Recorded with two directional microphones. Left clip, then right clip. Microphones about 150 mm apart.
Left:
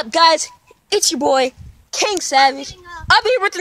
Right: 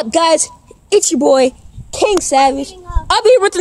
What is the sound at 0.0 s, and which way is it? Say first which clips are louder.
A woman's voice: right 1 dB; 10° left (ahead or behind).